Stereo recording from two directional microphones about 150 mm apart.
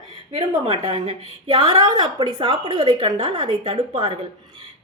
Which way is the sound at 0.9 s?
35° right (ahead or behind).